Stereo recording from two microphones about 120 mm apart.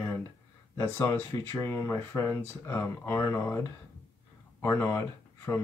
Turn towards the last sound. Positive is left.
turn(degrees=25)  # may be behind; listen again after turning